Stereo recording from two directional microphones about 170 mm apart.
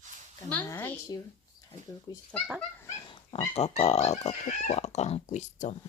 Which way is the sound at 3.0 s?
30° left (ahead or behind).